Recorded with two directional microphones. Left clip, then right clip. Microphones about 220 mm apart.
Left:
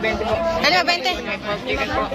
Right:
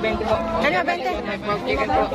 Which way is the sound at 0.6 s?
5° right (ahead or behind).